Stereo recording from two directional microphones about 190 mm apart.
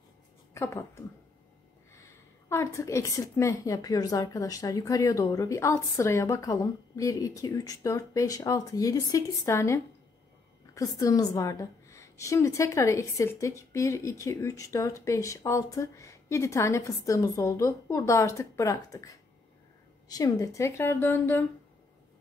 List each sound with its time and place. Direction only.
0.6 s a woman's voice: 15° left (ahead or behind)